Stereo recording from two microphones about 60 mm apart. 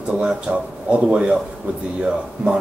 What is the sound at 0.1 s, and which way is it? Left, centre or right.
Speech, centre.